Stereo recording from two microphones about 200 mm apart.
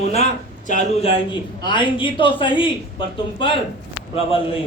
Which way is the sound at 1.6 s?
25° left (ahead or behind).